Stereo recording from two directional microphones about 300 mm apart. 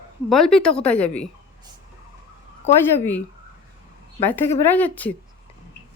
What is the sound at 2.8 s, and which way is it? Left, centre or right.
Speech, centre.